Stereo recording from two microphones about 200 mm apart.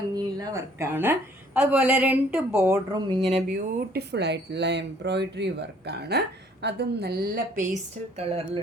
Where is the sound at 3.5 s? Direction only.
50° right (ahead or behind).